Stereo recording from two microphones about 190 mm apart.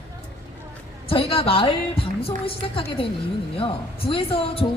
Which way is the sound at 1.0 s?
30° left (ahead or behind).